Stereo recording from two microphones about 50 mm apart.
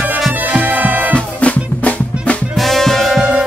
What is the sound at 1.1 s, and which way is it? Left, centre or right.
Music, left.